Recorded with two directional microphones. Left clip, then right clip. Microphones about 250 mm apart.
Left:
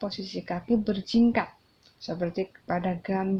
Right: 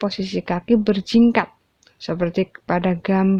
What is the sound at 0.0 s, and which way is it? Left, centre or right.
Speech, right.